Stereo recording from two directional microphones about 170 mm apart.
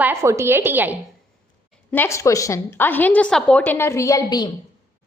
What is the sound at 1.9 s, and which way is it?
A woman's voice, 15° left (ahead or behind).